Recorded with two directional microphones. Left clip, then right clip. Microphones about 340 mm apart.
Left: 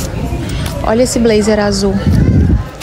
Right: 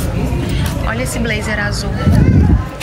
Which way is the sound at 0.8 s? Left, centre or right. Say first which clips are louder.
Left 11 dB; centre.